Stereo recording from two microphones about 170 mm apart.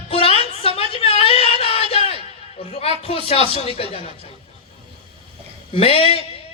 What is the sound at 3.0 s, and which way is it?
Speech, 35° left (ahead or behind).